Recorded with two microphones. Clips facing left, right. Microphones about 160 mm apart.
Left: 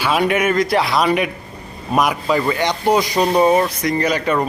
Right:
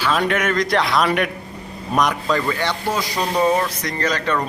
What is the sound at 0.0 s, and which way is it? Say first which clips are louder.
Speech: left 3 dB; 10° left (ahead or behind).